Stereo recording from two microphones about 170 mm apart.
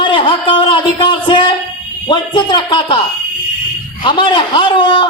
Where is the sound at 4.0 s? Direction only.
30° left (ahead or behind).